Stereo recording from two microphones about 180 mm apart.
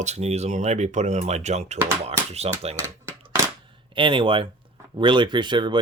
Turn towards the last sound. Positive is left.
turn(degrees=-25)  # may be behind; listen again after turning